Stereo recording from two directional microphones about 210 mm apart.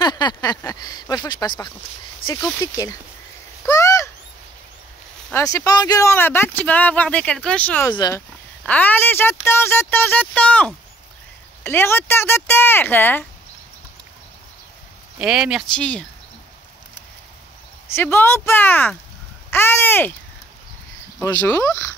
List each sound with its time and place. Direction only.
0.0 s a sound: 20° left (ahead or behind)
2.6 s speech: 15° left (ahead or behind)
3.6 s bird: 15° left (ahead or behind)
5.3 s speech: 15° left (ahead or behind)
7.9 s speech: 20° left (ahead or behind)
8.6 s speech: 5° left (ahead or behind)
15.1 s speech: 5° right (ahead or behind)
17.9 s speech: 10° left (ahead or behind)
19.5 s a sound: 10° left (ahead or behind)
21.2 s speech: 10° left (ahead or behind)